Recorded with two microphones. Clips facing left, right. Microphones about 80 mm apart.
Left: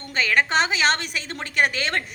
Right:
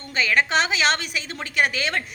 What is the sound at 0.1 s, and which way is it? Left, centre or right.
A woman's voice, left.